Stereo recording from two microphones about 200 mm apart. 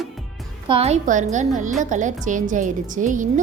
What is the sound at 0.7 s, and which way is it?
A woman's voice, 30° right (ahead or behind).